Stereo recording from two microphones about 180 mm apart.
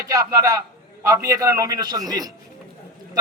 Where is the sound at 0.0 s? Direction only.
20° right (ahead or behind).